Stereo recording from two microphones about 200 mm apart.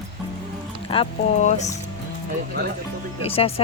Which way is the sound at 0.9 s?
30° left (ahead or behind).